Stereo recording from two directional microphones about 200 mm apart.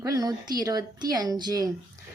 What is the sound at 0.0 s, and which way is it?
Speech, 15° right (ahead or behind).